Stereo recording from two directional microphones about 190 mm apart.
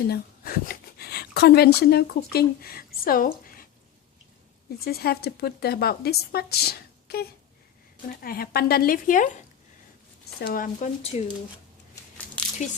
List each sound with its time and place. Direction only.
0.1 s speech: 50° left (ahead or behind)
4.9 s speech: 55° left (ahead or behind)
10.4 s speech: 50° left (ahead or behind)
11.1 s speech: 35° left (ahead or behind)
12.4 s a sound: 5° left (ahead or behind)